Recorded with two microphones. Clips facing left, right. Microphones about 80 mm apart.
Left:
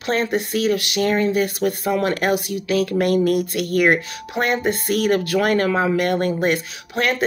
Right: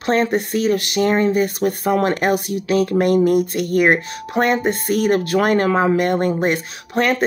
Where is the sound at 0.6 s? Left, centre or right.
Right.